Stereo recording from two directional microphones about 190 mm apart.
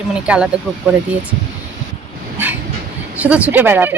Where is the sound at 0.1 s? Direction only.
5° right (ahead or behind).